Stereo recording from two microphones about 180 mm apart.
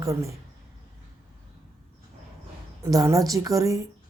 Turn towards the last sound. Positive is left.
turn(degrees=-20)  # may be behind; listen again after turning